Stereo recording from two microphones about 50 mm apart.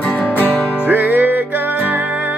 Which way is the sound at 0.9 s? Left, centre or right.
Right.